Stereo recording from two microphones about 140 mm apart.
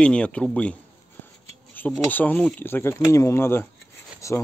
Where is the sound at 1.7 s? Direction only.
10° left (ahead or behind).